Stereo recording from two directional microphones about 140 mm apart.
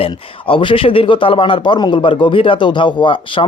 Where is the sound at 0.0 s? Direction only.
40° left (ahead or behind).